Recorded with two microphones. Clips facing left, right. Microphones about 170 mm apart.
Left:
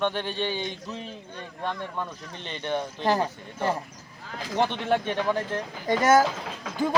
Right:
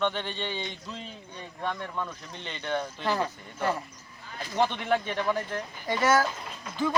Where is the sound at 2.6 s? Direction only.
15° left (ahead or behind).